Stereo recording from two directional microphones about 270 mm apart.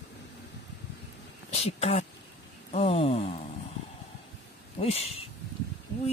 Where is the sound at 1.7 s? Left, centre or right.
Left.